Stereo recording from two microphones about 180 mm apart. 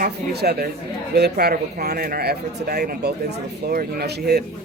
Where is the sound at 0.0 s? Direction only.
60° right (ahead or behind).